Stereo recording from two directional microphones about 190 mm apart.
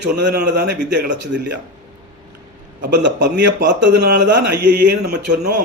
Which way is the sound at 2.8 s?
65° right (ahead or behind).